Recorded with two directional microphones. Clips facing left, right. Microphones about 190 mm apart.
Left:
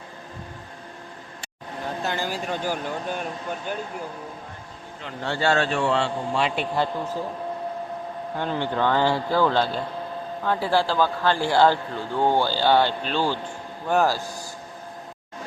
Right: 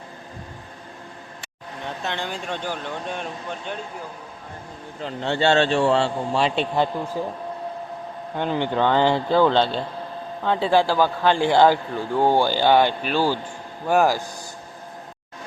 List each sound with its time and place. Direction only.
1.8 s speech: 5° left (ahead or behind)
5.2 s a man's voice: 25° right (ahead or behind)
8.4 s a man's voice: 20° right (ahead or behind)